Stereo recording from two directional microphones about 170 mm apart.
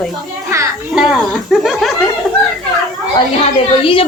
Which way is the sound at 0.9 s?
Centre (ahead or behind).